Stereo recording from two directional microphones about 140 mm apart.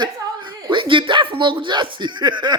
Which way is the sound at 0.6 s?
35° right (ahead or behind).